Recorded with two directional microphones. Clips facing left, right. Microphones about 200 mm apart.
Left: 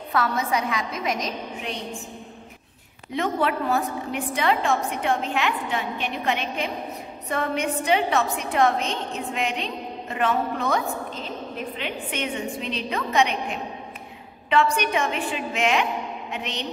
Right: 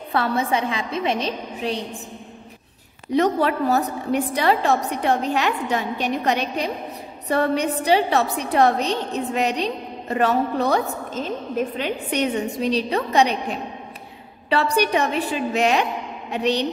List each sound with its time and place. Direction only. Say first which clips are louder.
0.1 s a woman's voice: right 3 dB; 30° right (ahead or behind)
3.1 s a woman's voice: right 5 dB; 40° right (ahead or behind)